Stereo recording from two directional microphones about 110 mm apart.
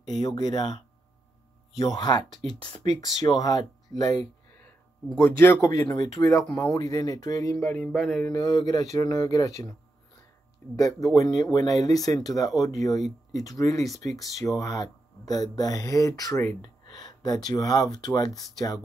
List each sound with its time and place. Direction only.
0.2 s speech: 40° left (ahead or behind)
1.8 s speech: 35° left (ahead or behind)
5.2 s speech: 20° left (ahead or behind)
5.6 s speech: 30° left (ahead or behind)
7.6 s speech: 10° left (ahead or behind)
8.3 s speech: 40° left (ahead or behind)
10.8 s speech: 35° left (ahead or behind)
16.6 s speech: 40° left (ahead or behind)